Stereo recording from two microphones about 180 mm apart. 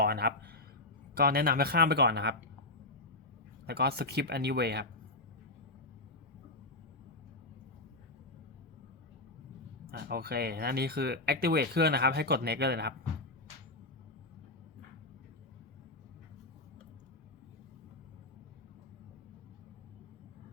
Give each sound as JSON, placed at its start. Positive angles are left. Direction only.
{"t": 0.0, "sound": "speech", "side_deg": -60}
{"t": 3.7, "sound": "speech", "side_deg": -60}
{"t": 9.9, "sound": "speech", "side_deg": -55}